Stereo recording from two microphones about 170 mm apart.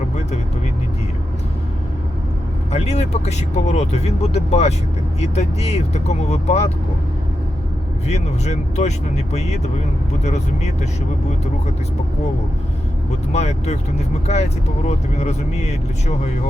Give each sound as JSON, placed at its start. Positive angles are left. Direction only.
{"t": 2.7, "sound": "speech", "side_deg": 40}
{"t": 8.0, "sound": "speech", "side_deg": 40}
{"t": 10.2, "sound": "speech", "side_deg": 40}
{"t": 13.3, "sound": "speech", "side_deg": 40}
{"t": 14.8, "sound": "speech", "side_deg": 40}